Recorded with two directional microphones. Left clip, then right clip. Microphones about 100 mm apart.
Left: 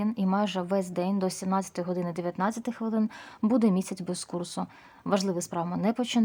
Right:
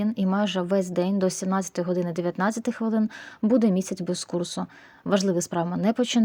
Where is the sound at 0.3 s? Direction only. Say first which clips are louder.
Right 3 dB; 20° right (ahead or behind).